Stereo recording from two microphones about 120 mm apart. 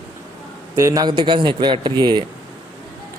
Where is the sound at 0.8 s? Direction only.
25° right (ahead or behind).